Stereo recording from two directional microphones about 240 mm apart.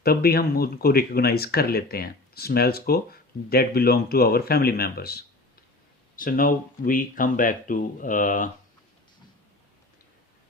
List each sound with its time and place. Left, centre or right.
0.0 s speech: left